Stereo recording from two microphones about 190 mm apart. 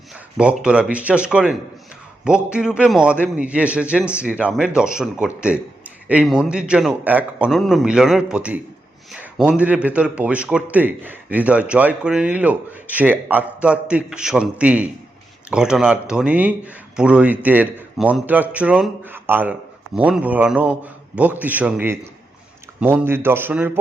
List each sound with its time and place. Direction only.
0.1 s a man's voice: 5° right (ahead or behind)